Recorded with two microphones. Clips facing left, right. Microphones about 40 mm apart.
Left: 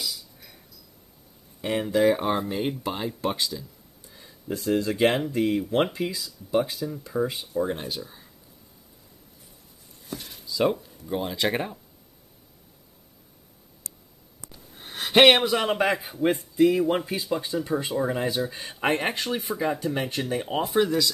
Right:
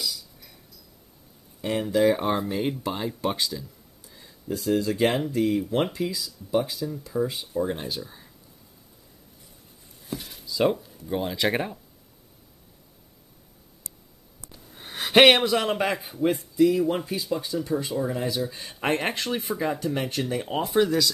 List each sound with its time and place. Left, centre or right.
1.6 s speech: centre
2.0 s speech: centre
3.3 s speech: centre
4.6 s speech: left
7.5 s speech: centre
10.0 s speech: centre
14.8 s a sound: centre
15.4 s speech: centre
15.8 s speech: centre
16.5 s speech: left
16.8 s speech: left
18.7 s speech: centre
20.4 s speech: centre